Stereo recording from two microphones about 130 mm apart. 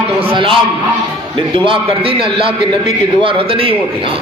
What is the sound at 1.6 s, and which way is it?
A man's voice, 45° right (ahead or behind).